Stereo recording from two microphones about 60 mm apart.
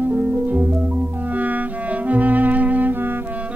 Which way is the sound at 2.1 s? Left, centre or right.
Right.